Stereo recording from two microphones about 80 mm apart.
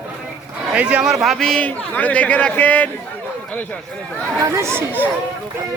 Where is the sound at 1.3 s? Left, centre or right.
Centre.